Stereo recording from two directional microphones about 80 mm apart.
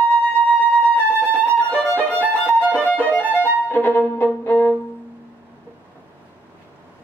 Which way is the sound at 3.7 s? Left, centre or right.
Left.